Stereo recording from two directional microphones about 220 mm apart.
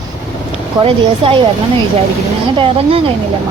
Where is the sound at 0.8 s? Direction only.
25° right (ahead or behind).